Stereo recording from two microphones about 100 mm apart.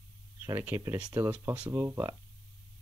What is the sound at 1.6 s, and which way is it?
Speech, 30° right (ahead or behind).